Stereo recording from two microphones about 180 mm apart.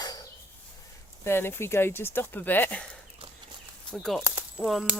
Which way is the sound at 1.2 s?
15° left (ahead or behind).